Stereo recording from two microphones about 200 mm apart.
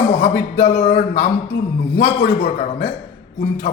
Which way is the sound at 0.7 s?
35° left (ahead or behind).